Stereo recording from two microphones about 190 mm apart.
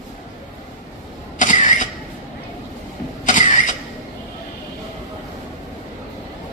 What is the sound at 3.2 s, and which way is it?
Mechanisms, 45° left (ahead or behind).